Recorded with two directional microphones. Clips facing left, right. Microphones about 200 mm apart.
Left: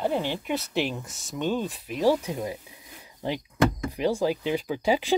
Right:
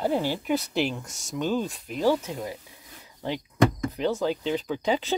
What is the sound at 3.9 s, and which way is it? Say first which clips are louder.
Speech: left 1 dB; 10° left (ahead or behind).